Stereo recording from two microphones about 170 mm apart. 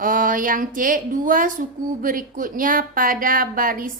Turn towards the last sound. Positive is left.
turn(degrees=-55)  # may be behind; listen again after turning